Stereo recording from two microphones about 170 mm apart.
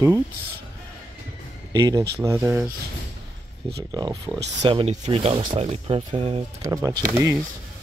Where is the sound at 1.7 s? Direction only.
25° right (ahead or behind).